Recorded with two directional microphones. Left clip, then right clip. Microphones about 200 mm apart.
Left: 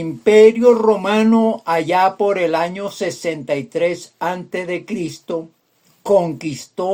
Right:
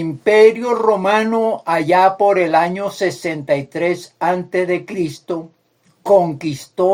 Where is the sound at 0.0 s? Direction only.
30° left (ahead or behind).